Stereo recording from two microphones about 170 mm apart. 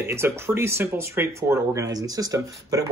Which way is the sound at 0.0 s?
15° right (ahead or behind).